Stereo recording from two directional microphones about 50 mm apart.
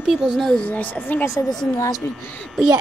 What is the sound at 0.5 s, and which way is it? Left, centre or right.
Speech, left.